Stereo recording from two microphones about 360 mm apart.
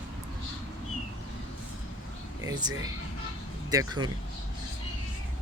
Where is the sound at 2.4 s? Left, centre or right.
Centre.